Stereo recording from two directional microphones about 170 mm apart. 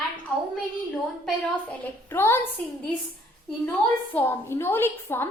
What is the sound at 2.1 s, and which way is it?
Speech, 15° left (ahead or behind).